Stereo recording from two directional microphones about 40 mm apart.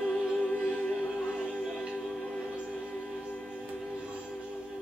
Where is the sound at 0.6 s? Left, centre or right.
Left.